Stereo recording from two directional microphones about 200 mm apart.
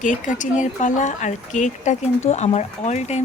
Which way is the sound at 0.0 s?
40° left (ahead or behind).